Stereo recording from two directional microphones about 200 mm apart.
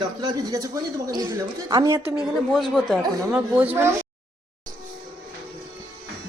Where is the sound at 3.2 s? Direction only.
10° right (ahead or behind).